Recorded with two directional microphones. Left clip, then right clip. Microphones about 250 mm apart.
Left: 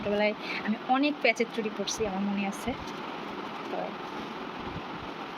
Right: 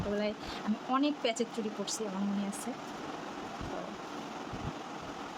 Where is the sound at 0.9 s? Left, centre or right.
Centre.